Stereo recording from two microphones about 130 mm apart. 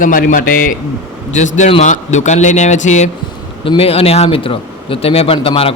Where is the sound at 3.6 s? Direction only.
45° left (ahead or behind).